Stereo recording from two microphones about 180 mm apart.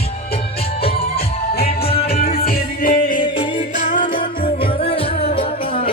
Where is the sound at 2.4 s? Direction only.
50° left (ahead or behind).